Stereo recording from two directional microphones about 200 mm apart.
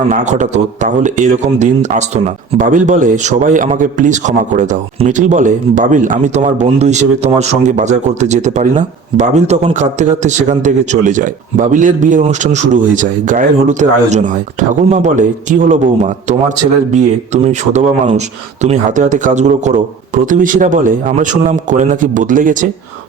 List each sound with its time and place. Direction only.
0.1 s speech: 35° right (ahead or behind)